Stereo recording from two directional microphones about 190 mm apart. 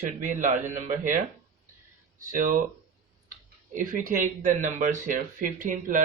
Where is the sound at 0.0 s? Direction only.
40° right (ahead or behind).